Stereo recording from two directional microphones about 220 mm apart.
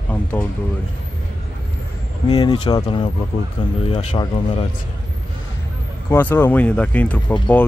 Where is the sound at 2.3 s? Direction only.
20° left (ahead or behind).